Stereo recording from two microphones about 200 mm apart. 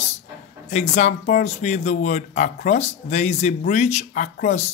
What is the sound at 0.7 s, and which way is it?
Speech, 35° left (ahead or behind).